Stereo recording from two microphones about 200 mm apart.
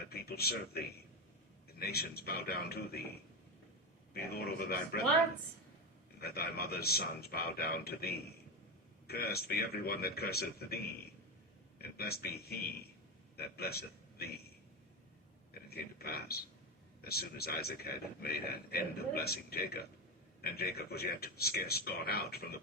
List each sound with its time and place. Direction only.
0.0 s speech: 50° left (ahead or behind)
4.1 s speech: 50° left (ahead or behind)
6.1 s speech: 50° left (ahead or behind)
11.8 s a man's voice: 50° left (ahead or behind)
15.7 s speech: 50° left (ahead or behind)